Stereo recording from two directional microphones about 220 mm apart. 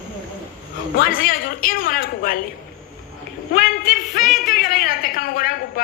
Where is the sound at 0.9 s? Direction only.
40° left (ahead or behind).